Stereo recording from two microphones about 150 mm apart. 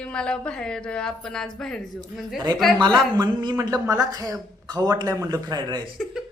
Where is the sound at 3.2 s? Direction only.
25° right (ahead or behind).